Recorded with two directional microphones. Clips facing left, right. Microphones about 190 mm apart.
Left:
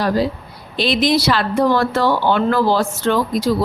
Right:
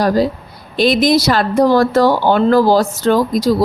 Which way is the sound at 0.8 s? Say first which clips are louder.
Right 4 dB; 45° right (ahead or behind).